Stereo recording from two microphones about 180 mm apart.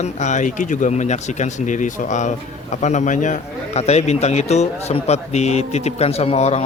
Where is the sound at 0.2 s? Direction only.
45° left (ahead or behind).